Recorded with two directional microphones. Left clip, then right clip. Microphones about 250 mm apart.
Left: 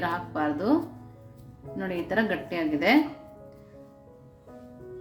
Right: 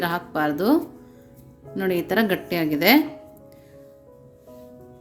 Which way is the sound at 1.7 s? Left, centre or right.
Right.